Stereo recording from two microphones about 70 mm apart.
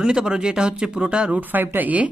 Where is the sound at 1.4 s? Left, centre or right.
Right.